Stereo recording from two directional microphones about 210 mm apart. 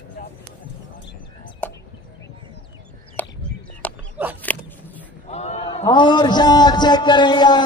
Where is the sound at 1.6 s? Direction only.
10° left (ahead or behind).